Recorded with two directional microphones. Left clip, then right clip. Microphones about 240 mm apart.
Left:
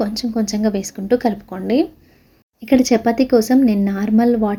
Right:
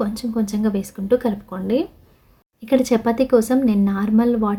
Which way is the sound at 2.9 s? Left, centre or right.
Centre.